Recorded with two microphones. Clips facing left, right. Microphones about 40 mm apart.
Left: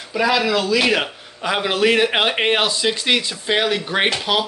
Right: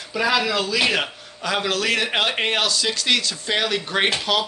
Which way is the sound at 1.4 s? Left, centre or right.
Centre.